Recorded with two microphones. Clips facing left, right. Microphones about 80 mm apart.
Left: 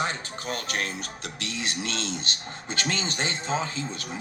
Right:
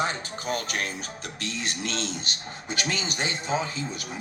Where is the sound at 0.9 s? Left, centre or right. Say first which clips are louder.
Even; centre.